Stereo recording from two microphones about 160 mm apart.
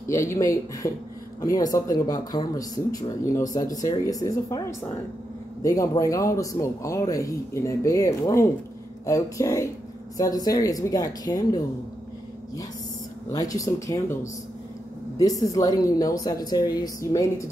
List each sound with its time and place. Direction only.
0.1 s a man's voice: 20° left (ahead or behind)
13.3 s a man's voice: 20° left (ahead or behind)